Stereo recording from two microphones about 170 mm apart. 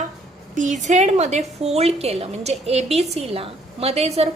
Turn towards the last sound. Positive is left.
turn(degrees=-35)  # may be behind; listen again after turning